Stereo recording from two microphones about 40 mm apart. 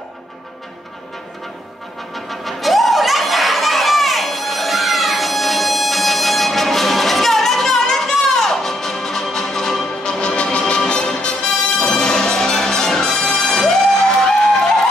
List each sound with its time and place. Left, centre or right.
2.1 s music: centre